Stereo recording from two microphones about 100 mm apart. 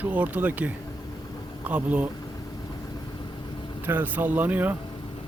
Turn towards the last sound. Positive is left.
turn(degrees=-15)  # may be behind; listen again after turning